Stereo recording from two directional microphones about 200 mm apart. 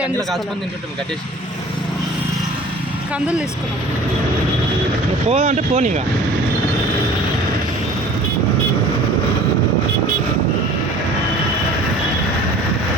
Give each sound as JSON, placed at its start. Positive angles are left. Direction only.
{"t": 5.3, "sound": "speech", "side_deg": -35}